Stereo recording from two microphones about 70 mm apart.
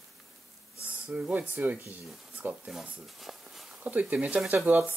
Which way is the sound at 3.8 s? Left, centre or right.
Right.